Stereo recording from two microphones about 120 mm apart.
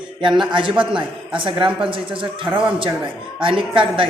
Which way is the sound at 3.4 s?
45° right (ahead or behind).